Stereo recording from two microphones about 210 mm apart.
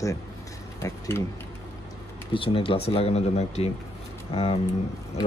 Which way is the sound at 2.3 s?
25° left (ahead or behind).